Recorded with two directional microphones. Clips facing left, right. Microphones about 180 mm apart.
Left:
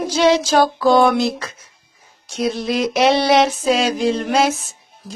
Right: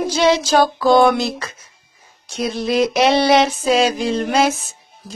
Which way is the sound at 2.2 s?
Centre (ahead or behind).